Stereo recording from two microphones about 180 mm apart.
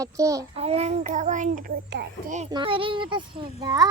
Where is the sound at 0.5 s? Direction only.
35° right (ahead or behind).